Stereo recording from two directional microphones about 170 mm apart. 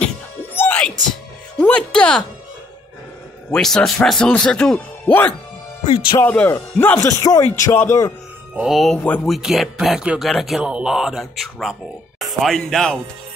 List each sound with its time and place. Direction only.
0.6 s music: 10° left (ahead or behind)
1.6 s speech: 5° left (ahead or behind)
3.5 s speech: 5° left (ahead or behind)
8.5 s speech: centre (ahead or behind)